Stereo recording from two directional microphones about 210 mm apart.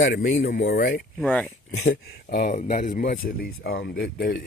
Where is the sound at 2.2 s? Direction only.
40° left (ahead or behind).